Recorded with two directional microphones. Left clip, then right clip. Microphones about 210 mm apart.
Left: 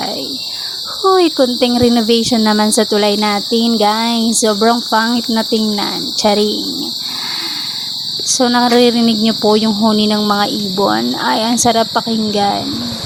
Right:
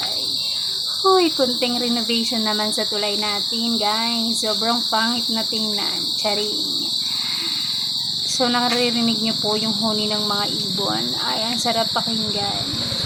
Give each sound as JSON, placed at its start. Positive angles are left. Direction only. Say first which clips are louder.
{"t": 1.0, "sound": "speech", "louder": "left 6 dB", "side_deg": 40}
{"t": 8.3, "sound": "speech", "louder": "left 9 dB", "side_deg": 35}